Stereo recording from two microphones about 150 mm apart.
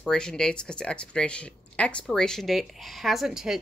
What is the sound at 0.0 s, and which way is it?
Speech, 5° left (ahead or behind).